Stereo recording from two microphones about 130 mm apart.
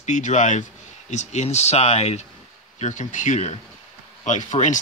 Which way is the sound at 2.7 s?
70° left (ahead or behind).